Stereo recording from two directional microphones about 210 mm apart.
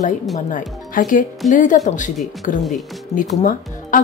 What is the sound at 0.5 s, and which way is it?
A woman's voice, 40° left (ahead or behind).